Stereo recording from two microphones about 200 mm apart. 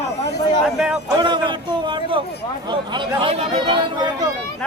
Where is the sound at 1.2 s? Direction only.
25° right (ahead or behind).